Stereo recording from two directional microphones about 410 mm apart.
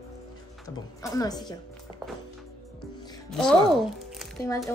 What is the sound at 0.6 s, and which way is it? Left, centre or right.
Speech, centre.